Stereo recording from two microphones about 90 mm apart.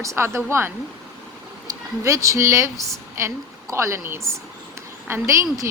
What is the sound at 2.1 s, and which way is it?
A woman's voice, 35° right (ahead or behind).